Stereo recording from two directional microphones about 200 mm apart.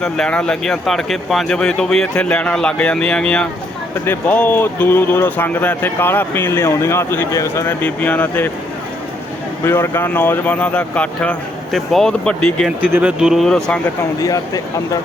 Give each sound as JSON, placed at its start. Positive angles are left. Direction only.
{"t": 0.0, "sound": "speech", "side_deg": 5}
{"t": 9.6, "sound": "speech", "side_deg": 10}
{"t": 12.8, "sound": "speech", "side_deg": -5}
{"t": 14.2, "sound": "speech", "side_deg": 20}